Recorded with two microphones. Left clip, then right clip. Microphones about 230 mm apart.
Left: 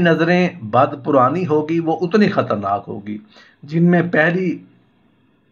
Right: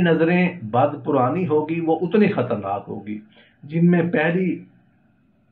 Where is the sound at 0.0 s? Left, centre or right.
Left.